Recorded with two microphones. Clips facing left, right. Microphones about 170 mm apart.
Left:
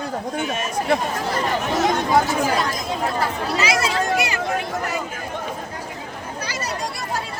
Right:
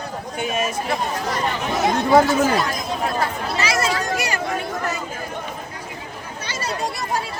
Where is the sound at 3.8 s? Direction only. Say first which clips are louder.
Left 1 dB; 45° right (ahead or behind).